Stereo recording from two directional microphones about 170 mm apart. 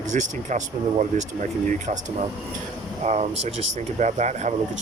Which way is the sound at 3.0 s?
40° right (ahead or behind).